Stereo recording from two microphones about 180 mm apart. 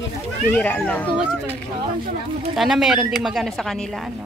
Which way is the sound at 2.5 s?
Centre (ahead or behind).